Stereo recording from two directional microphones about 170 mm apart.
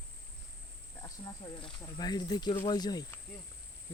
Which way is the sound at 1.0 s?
25° left (ahead or behind).